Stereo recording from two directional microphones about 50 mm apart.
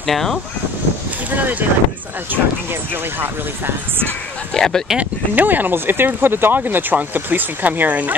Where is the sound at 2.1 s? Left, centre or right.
Right.